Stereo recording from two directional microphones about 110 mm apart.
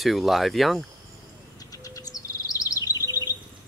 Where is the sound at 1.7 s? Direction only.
35° left (ahead or behind).